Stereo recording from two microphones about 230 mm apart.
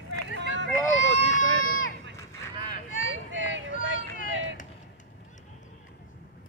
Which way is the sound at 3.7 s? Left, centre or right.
Left.